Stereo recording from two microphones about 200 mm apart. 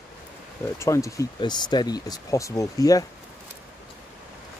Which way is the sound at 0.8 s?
15° left (ahead or behind).